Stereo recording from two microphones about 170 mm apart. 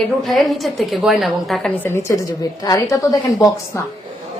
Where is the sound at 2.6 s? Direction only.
20° left (ahead or behind).